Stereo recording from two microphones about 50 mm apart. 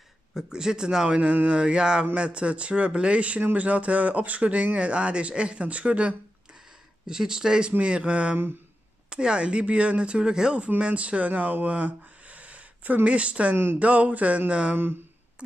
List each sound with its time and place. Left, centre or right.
0.3 s speech: centre
1.0 s speech: right
1.6 s speech: centre
7.1 s speech: centre